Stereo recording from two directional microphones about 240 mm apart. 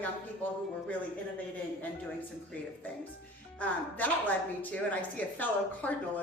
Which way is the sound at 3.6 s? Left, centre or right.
Centre.